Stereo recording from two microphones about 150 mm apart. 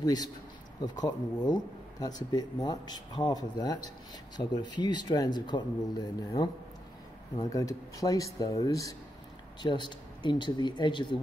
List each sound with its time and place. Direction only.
0.0 s speech: 25° left (ahead or behind)